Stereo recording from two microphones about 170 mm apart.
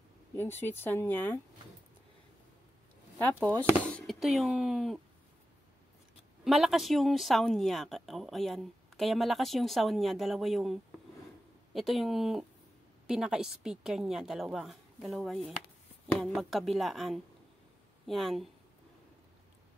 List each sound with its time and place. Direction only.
0.4 s speech: 15° left (ahead or behind)
3.9 s speech: centre (ahead or behind)
6.4 s speech: centre (ahead or behind)